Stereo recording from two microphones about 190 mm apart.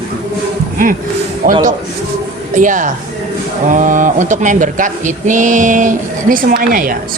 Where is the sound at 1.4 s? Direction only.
45° right (ahead or behind).